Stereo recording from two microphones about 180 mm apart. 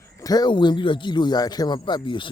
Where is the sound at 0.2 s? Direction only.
20° left (ahead or behind).